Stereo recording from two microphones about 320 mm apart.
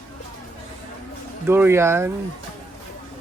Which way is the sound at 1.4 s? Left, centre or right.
Centre.